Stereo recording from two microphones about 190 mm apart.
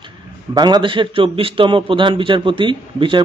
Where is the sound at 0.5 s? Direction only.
20° right (ahead or behind).